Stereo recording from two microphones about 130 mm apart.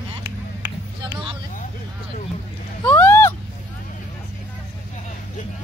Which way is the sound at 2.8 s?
15° left (ahead or behind).